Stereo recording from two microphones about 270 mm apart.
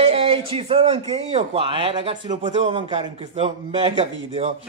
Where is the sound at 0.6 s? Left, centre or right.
Right.